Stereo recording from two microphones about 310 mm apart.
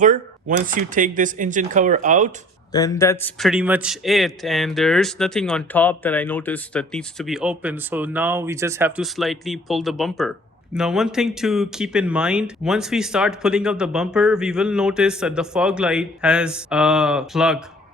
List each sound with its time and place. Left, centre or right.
0.0 s speech: right
2.7 s a man's voice: centre